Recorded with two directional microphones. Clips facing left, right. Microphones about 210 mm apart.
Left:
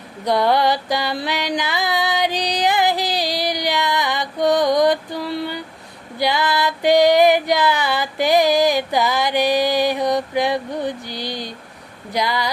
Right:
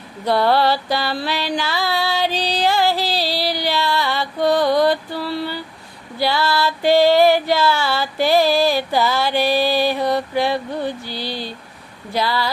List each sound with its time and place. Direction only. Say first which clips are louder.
0.3 s music: right 1 dB; 15° left (ahead or behind)
6.1 s child singing: even; 15° left (ahead or behind)
12.1 s speech: right 1 dB; 15° left (ahead or behind)